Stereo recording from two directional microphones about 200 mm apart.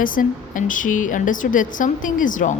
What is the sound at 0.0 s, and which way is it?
A woman's voice, 45° left (ahead or behind).